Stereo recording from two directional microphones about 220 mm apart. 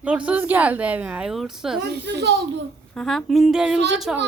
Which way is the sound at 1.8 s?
50° right (ahead or behind).